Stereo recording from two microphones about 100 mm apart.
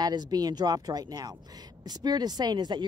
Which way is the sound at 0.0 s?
40° right (ahead or behind).